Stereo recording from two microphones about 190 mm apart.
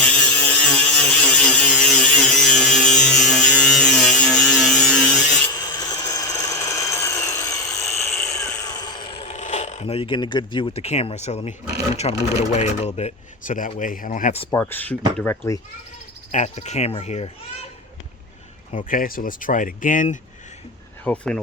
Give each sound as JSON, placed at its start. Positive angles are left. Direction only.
{"t": 0.0, "sound": "a sound", "side_deg": 10}
{"t": 5.5, "sound": "tools", "side_deg": 20}
{"t": 8.2, "sound": "speech", "side_deg": 15}
{"t": 14.5, "sound": "speech", "side_deg": 10}
{"t": 16.3, "sound": "a child's voice", "side_deg": 40}
{"t": 18.7, "sound": "speech", "side_deg": 45}
{"t": 21.0, "sound": "speech", "side_deg": 5}